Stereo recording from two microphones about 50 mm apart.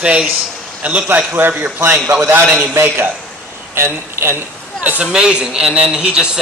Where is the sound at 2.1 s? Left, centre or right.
Right.